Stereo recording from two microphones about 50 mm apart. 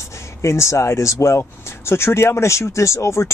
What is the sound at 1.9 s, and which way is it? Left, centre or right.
Speech, left.